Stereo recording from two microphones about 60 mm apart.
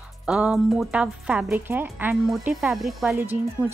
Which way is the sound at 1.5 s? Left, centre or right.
Right.